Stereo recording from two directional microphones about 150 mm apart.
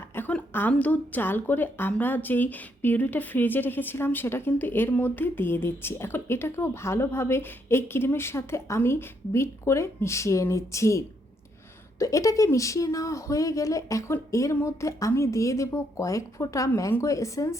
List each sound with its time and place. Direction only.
0.1 s a woman's voice: 10° left (ahead or behind)